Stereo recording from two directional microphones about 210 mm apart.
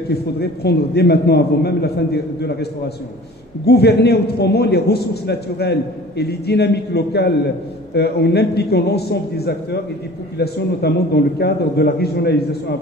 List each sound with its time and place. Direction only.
0.1 s a man's voice: 50° left (ahead or behind)
3.6 s a man's voice: 50° left (ahead or behind)